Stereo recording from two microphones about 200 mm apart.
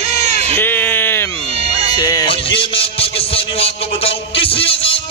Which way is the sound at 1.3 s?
30° right (ahead or behind).